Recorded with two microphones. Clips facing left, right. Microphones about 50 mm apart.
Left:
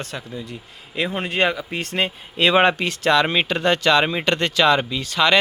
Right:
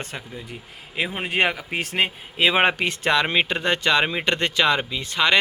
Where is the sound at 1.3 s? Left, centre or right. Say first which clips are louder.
Left 1 dB; right.